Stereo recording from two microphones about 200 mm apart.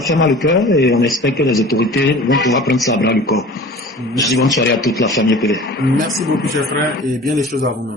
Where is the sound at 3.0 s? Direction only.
55° left (ahead or behind).